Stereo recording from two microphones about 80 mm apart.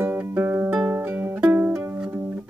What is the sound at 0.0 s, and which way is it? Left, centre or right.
Music, right.